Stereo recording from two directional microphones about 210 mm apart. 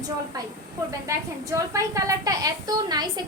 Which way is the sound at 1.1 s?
15° right (ahead or behind).